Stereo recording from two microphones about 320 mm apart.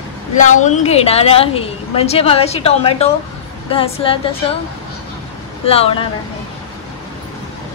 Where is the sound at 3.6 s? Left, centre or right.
Centre.